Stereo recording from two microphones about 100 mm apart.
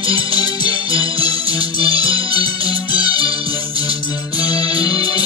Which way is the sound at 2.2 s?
40° left (ahead or behind).